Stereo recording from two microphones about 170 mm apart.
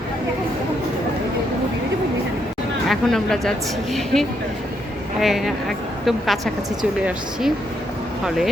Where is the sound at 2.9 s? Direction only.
Centre (ahead or behind).